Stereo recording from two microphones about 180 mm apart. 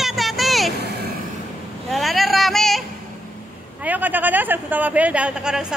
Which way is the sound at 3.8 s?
10° right (ahead or behind).